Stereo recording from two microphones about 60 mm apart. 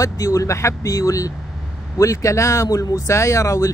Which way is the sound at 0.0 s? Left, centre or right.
Left.